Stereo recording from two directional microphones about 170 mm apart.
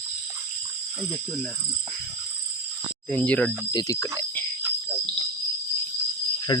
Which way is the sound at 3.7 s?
20° left (ahead or behind).